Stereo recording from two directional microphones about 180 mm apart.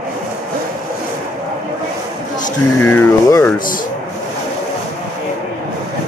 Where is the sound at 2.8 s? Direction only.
10° left (ahead or behind).